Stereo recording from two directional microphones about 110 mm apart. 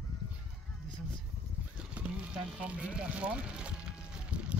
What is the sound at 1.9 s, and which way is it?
Speech, 10° right (ahead or behind).